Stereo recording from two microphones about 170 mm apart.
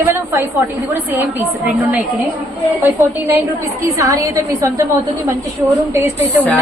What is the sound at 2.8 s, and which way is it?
A woman's voice, 15° right (ahead or behind).